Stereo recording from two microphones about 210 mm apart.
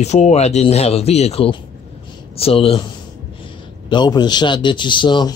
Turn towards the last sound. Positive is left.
turn(degrees=20)  # may be behind; listen again after turning